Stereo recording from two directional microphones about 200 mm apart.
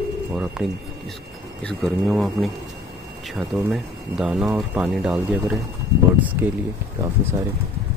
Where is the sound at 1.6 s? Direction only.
5° left (ahead or behind).